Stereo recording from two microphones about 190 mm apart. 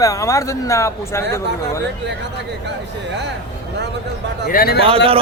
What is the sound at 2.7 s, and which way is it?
Speech, 65° right (ahead or behind).